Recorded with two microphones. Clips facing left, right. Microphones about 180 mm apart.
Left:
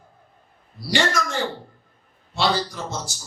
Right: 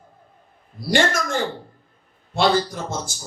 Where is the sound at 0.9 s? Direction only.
50° right (ahead or behind).